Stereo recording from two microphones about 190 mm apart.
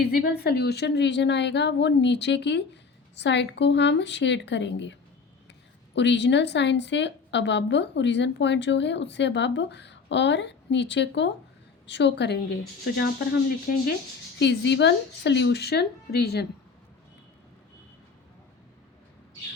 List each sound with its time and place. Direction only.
0.0 s a woman's voice: 55° left (ahead or behind)
13.7 s speech: 50° left (ahead or behind)
14.3 s a woman's voice: 65° left (ahead or behind)